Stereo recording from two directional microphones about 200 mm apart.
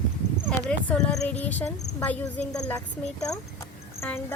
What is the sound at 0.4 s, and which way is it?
Speech, 5° left (ahead or behind).